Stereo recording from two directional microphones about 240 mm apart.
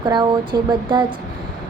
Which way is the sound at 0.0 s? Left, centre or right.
Centre.